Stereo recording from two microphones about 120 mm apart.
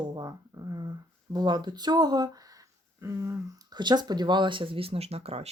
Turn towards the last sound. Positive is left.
turn(degrees=-60)  # may be behind; listen again after turning